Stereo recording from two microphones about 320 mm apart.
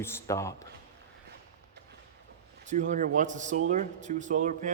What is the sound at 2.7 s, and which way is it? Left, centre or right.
Speech, right.